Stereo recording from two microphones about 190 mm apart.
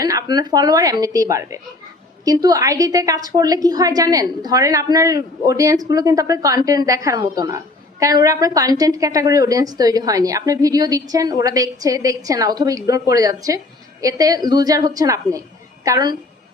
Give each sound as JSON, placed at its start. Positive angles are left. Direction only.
{"t": 0.0, "sound": "a woman's voice", "side_deg": -20}